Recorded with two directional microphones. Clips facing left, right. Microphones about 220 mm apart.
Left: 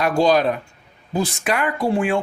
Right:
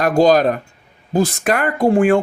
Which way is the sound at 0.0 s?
45° right (ahead or behind).